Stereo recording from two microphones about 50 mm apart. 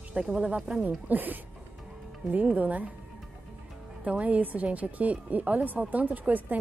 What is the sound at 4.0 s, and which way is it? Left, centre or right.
A woman's voice, right.